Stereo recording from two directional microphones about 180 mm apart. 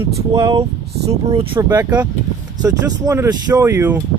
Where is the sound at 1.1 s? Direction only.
35° right (ahead or behind).